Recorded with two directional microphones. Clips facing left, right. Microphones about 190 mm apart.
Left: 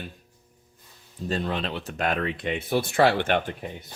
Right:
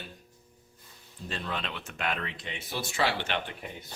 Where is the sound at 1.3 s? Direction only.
40° left (ahead or behind).